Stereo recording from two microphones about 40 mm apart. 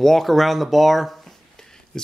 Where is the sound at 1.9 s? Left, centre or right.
Centre.